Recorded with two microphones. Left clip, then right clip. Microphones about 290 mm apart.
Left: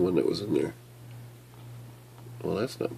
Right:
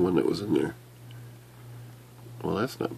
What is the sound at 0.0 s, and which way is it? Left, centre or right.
Speech, centre.